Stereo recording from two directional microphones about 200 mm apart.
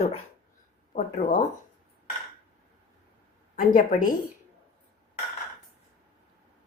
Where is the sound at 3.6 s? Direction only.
40° left (ahead or behind).